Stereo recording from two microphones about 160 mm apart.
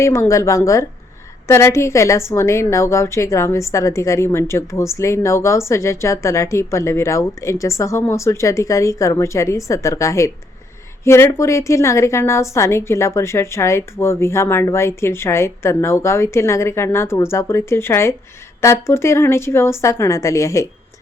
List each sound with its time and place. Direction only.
0.0 s a woman's voice: 20° left (ahead or behind)